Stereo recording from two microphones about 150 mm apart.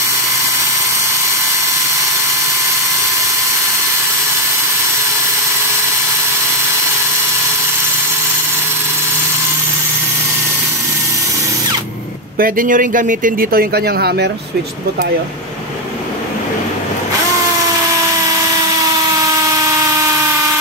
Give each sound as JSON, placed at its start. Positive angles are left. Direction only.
{"t": 12.4, "sound": "speech", "side_deg": -70}
{"t": 19.1, "sound": "helicopter", "side_deg": -20}